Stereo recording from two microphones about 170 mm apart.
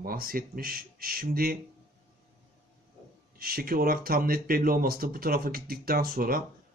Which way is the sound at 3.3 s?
60° right (ahead or behind).